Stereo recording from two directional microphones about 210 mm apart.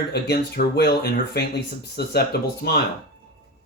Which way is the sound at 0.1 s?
50° left (ahead or behind).